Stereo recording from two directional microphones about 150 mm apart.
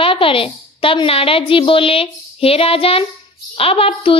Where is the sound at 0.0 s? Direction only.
35° left (ahead or behind).